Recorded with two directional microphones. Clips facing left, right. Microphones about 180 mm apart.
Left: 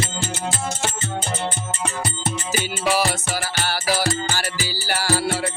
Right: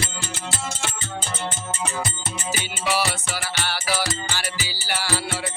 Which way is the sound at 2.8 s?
40° left (ahead or behind).